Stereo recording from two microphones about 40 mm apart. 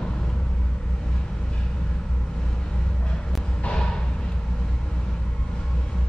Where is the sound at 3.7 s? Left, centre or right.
Centre.